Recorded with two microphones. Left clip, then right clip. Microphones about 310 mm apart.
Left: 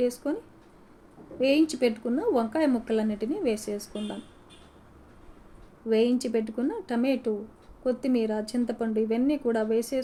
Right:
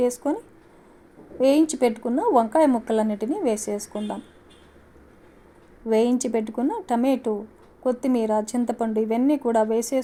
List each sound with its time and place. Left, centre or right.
0.0 s a woman's voice: centre
1.4 s a woman's voice: centre
5.9 s a woman's voice: right